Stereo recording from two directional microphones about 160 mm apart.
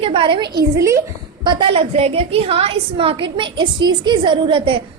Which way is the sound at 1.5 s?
30° right (ahead or behind).